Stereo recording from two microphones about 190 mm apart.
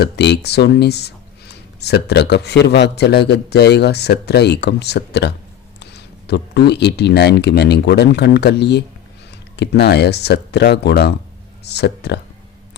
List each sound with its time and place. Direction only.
0.0 s speech: 60° left (ahead or behind)